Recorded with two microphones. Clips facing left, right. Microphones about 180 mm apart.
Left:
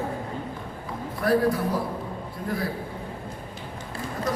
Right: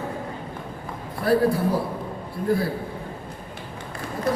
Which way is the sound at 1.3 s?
30° right (ahead or behind).